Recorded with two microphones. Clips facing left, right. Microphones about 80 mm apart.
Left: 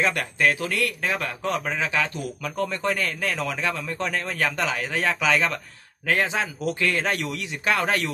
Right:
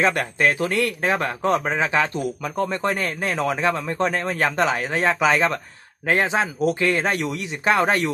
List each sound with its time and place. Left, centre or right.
0.0 s speech: right